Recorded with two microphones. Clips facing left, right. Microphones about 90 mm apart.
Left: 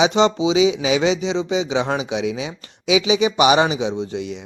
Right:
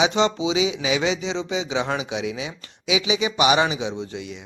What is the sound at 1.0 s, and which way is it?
A man's voice, 20° left (ahead or behind).